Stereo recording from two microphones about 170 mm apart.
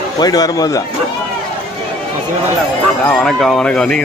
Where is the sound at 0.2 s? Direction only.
20° left (ahead or behind).